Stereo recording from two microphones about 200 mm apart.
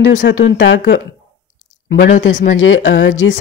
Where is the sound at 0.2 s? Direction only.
60° left (ahead or behind).